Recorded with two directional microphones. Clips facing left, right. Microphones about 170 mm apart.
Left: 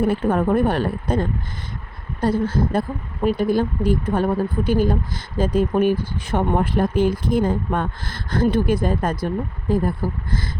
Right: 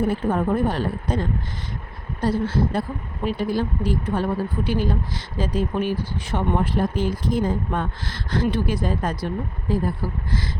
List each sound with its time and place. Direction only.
0.0 s speech: 70° left (ahead or behind); by 10.5 s 50° left (ahead or behind)